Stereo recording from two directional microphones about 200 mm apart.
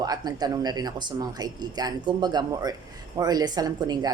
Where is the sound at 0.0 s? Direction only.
20° right (ahead or behind).